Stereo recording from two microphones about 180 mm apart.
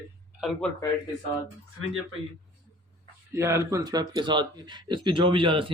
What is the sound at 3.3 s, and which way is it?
Speech, 15° right (ahead or behind).